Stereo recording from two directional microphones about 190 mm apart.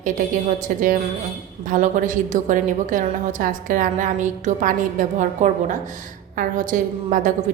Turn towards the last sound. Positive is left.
turn(degrees=-45)  # may be behind; listen again after turning